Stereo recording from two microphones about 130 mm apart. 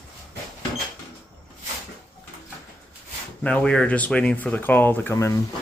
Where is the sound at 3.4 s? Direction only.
10° left (ahead or behind).